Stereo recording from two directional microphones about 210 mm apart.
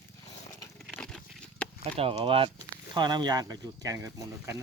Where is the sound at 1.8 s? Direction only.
30° right (ahead or behind).